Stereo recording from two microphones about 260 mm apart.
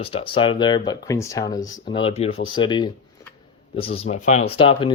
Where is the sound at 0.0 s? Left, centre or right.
Left.